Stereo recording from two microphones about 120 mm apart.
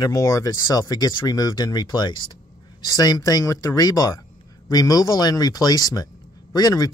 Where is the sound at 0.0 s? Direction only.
30° left (ahead or behind).